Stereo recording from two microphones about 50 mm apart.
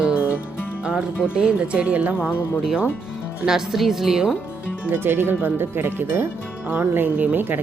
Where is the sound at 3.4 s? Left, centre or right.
Centre.